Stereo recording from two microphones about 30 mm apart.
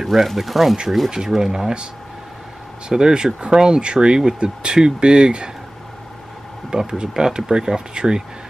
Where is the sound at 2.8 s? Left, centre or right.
Right.